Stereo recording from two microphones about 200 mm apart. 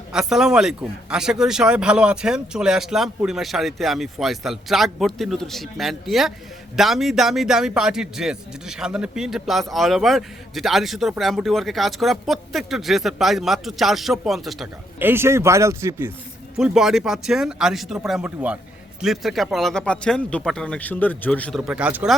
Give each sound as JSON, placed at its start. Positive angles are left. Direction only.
{"t": 0.1, "sound": "speech", "side_deg": -5}
{"t": 16.6, "sound": "speech", "side_deg": 0}